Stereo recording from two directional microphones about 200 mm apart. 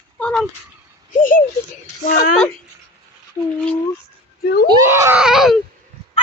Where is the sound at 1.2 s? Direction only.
45° left (ahead or behind).